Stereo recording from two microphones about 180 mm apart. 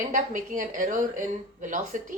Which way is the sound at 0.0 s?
45° right (ahead or behind).